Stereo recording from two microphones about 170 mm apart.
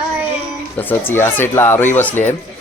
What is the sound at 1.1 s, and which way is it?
Speech, 15° left (ahead or behind).